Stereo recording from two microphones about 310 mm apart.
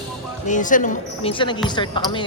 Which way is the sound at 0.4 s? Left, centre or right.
Left.